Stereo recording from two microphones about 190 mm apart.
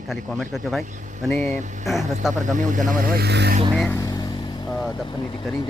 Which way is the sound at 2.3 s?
40° right (ahead or behind).